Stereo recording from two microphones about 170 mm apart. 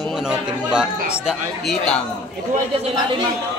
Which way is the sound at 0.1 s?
5° right (ahead or behind).